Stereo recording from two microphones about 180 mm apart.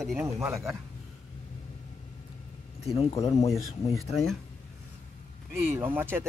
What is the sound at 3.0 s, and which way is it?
Speech, 30° left (ahead or behind).